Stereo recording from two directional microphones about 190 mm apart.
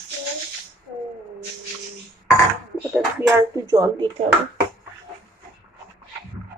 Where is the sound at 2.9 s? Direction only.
15° right (ahead or behind).